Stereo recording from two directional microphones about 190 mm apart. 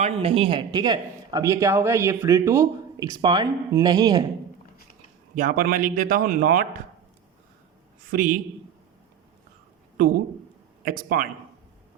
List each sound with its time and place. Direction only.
0.0 s a man's voice: 30° right (ahead or behind)
5.3 s a man's voice: 50° right (ahead or behind)
8.1 s a man's voice: 45° right (ahead or behind)
10.8 s a man's voice: 45° right (ahead or behind)